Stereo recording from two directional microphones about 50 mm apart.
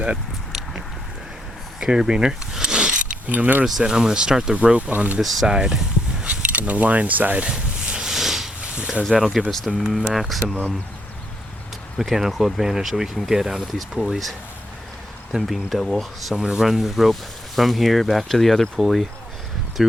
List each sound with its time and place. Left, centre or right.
1.8 s a sound: centre
3.3 s speech: right
3.8 s speech: centre; by 5.2 s right
5.2 s speech: centre
5.5 s speech: centre
6.2 s speech: right
7.4 s a sound: centre
8.6 s a sound: right
9.0 s speech: centre
11.9 s speech: centre